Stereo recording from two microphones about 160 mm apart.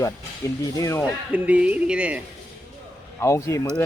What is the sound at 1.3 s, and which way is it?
Speech, 10° right (ahead or behind).